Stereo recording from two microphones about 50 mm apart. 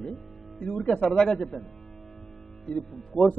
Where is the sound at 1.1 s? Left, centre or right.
Centre.